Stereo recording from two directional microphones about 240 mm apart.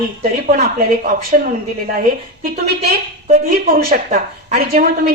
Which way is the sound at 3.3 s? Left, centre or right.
Right.